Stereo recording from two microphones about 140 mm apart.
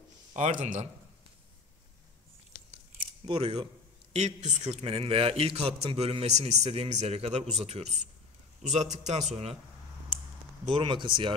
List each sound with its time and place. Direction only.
0.4 s a man's voice: 70° right (ahead or behind)
3.3 s a man's voice: 50° right (ahead or behind)
10.7 s speech: 35° right (ahead or behind)